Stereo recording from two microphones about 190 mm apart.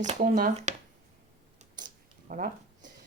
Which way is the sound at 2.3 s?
40° right (ahead or behind).